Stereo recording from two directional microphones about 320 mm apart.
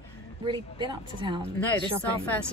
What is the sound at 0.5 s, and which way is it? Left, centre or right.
Speech, centre.